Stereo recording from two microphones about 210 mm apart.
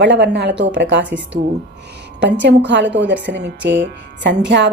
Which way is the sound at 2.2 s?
55° right (ahead or behind).